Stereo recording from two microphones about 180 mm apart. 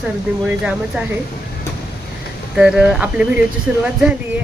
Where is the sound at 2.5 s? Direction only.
5° right (ahead or behind).